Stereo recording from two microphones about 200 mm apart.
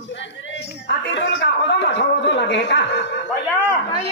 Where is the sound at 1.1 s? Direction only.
60° left (ahead or behind).